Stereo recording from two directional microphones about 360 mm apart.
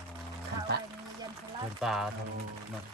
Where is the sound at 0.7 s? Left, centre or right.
Right.